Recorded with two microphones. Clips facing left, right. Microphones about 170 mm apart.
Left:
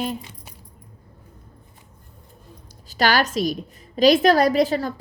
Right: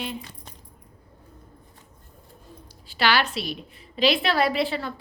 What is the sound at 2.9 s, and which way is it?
A woman's voice, 45° left (ahead or behind).